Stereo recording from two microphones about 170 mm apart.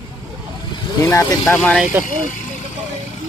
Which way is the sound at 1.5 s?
5° left (ahead or behind).